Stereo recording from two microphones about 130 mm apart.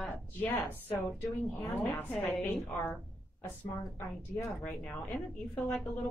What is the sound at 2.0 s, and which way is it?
Speech, 15° left (ahead or behind).